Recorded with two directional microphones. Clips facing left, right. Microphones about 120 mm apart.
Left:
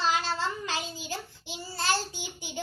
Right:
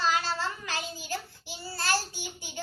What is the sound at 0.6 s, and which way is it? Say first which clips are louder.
Child singing: left 2 dB; 20° left (ahead or behind).